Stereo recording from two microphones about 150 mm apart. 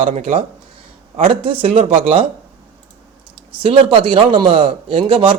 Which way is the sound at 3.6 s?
35° right (ahead or behind).